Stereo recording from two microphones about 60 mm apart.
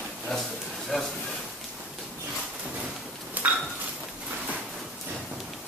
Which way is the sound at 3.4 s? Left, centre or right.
Right.